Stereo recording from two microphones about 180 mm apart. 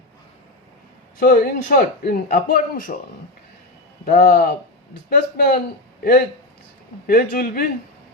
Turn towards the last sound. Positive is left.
turn(degrees=55)  # may be behind; listen again after turning